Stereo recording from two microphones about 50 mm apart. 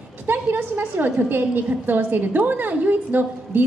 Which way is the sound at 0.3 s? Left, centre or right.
Right.